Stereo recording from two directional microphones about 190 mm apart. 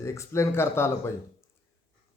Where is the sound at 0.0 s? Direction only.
15° left (ahead or behind).